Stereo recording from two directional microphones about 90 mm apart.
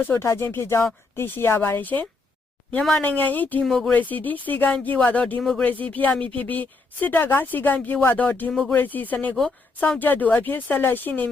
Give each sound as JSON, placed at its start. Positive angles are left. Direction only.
{"t": 0.0, "sound": "speech", "side_deg": 30}
{"t": 3.6, "sound": "speech", "side_deg": 5}
{"t": 3.9, "sound": "speech", "side_deg": 20}
{"t": 5.4, "sound": "speech", "side_deg": 5}
{"t": 5.6, "sound": "speech", "side_deg": 20}